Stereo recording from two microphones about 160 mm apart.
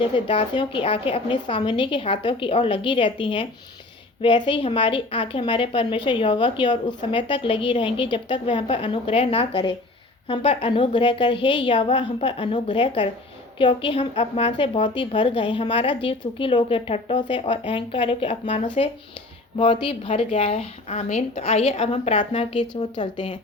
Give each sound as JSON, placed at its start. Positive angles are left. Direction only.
{"t": 0.3, "sound": "a woman's voice", "side_deg": 30}